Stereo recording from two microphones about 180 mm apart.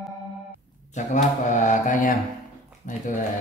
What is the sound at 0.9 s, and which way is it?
Speech, 40° left (ahead or behind).